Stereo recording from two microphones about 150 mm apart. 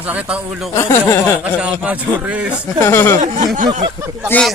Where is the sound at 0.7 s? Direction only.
20° left (ahead or behind).